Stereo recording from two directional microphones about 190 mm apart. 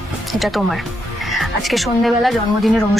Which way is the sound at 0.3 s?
Centre (ahead or behind).